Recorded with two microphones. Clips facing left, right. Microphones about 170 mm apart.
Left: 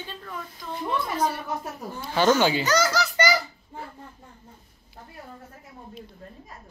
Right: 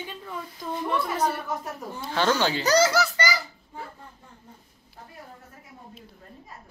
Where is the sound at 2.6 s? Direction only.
35° right (ahead or behind).